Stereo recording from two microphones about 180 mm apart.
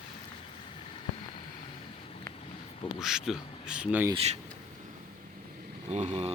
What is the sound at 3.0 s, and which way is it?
Speech, centre (ahead or behind).